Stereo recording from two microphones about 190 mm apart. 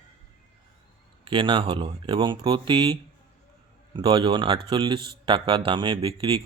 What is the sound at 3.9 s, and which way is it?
Speech, 25° right (ahead or behind).